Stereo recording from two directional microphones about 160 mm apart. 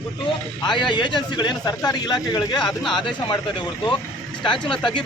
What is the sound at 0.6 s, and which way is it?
Speech, 30° left (ahead or behind).